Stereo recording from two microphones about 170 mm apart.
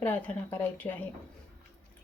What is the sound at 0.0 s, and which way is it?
Speech, 10° left (ahead or behind).